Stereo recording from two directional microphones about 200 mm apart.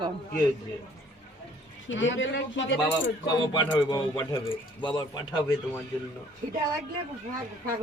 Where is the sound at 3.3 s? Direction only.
20° left (ahead or behind).